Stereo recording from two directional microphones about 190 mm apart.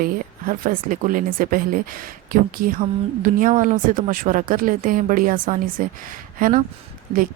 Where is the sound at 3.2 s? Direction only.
45° right (ahead or behind).